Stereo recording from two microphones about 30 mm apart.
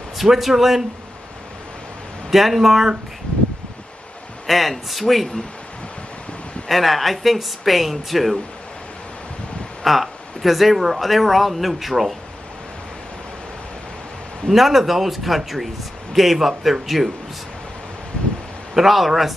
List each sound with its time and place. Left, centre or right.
0.2 s a man's voice: centre
2.3 s a man's voice: centre
4.5 s speech: centre
6.7 s speech: centre
9.8 s speech: centre
14.5 s speech: centre
18.8 s speech: centre